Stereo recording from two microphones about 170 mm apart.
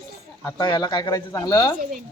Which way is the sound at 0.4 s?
20° left (ahead or behind).